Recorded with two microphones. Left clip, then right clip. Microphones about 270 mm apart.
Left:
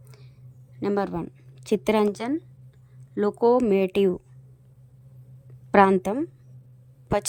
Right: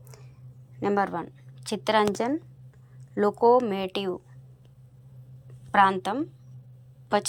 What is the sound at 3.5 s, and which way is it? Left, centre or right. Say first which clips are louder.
Speech: left 3 dB; left.